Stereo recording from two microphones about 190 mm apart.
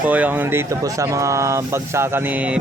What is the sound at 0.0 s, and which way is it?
A man's voice, 10° right (ahead or behind).